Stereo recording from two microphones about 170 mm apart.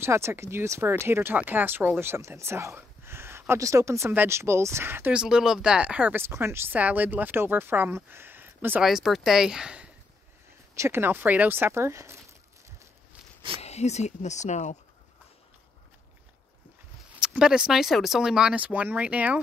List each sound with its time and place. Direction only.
0.0 s speech: 15° right (ahead or behind)
13.6 s speech: 40° left (ahead or behind)
17.2 s speech: 5° right (ahead or behind)